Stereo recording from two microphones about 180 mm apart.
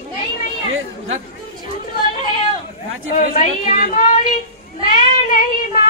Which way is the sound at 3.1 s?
45° left (ahead or behind).